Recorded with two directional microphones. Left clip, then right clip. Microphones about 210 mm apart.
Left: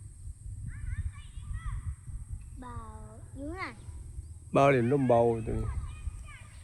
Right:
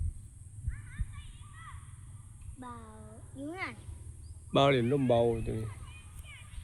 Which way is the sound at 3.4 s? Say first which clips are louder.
Even; 50° right (ahead or behind).